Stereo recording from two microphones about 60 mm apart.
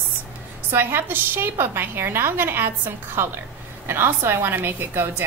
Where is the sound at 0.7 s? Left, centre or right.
Right.